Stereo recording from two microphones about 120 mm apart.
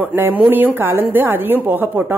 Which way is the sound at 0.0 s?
15° right (ahead or behind).